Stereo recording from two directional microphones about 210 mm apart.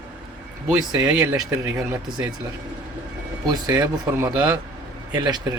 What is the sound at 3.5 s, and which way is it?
Speech, 20° right (ahead or behind).